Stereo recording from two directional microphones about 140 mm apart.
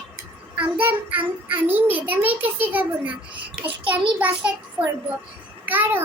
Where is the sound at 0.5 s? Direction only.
10° right (ahead or behind).